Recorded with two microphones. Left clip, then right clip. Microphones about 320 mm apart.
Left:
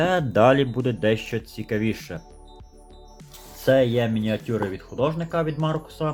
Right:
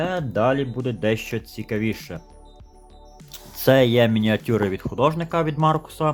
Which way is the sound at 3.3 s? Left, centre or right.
Centre.